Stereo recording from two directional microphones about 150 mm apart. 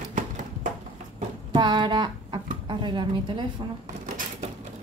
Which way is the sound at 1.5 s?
30° right (ahead or behind).